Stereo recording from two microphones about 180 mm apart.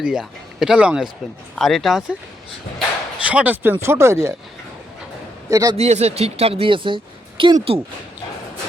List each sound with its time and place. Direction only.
0.0 s speech: 5° right (ahead or behind)
3.2 s speech: 10° right (ahead or behind)
5.5 s a man's voice: 20° right (ahead or behind)
5.7 s a woman's voice: 35° right (ahead or behind)